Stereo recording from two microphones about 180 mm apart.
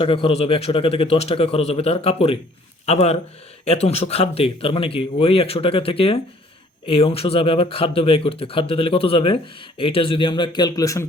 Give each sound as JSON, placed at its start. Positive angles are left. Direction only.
{"t": 0.0, "sound": "speech", "side_deg": 30}